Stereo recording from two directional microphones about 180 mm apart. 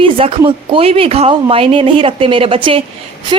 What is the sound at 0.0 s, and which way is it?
A woman's voice, 30° right (ahead or behind).